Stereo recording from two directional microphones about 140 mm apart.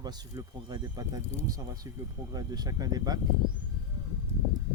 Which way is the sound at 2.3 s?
30° right (ahead or behind).